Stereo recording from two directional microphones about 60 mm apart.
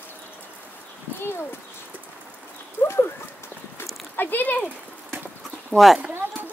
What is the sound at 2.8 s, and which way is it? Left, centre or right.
Horse, left.